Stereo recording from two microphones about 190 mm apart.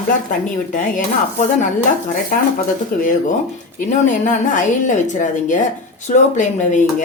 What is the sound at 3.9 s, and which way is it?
A woman's voice, 40° left (ahead or behind).